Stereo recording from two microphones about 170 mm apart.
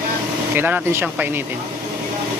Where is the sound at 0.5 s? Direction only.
10° right (ahead or behind).